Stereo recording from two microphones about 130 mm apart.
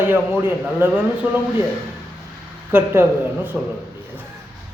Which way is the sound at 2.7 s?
15° right (ahead or behind).